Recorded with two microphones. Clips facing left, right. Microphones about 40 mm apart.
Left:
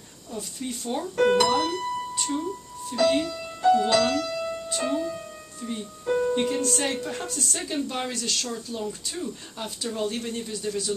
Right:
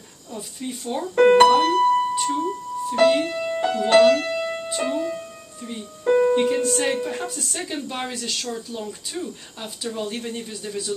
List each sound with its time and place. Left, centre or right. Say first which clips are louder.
0.4 s speech: right 1 dB; centre
1.2 s speech: right 7 dB; right
2.1 s speech: right 6 dB; centre
3.0 s speech: right 4 dB; right
3.9 s music: right 8 dB; right
4.6 s speech: even; right
6.0 s music: right 7 dB; right
6.3 s speech: right 5 dB; centre